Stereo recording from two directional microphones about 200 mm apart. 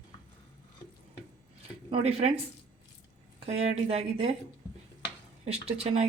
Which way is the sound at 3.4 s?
30° right (ahead or behind).